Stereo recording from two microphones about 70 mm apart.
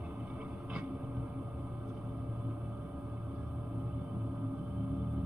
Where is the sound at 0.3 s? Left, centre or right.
Centre.